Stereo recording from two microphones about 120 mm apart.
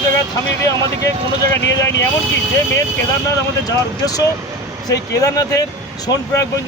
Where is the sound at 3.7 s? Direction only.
30° left (ahead or behind).